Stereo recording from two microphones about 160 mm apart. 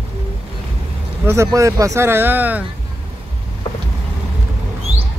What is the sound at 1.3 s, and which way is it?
Speech, 20° right (ahead or behind).